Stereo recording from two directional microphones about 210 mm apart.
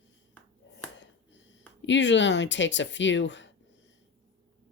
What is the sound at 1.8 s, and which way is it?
Speech, 60° left (ahead or behind).